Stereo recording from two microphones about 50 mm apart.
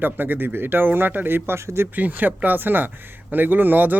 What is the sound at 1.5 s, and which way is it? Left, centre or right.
Speech, right.